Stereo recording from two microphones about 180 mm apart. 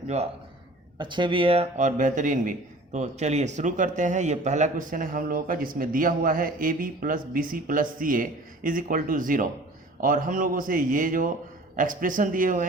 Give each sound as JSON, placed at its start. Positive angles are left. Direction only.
{"t": 0.9, "sound": "a man's voice", "side_deg": -25}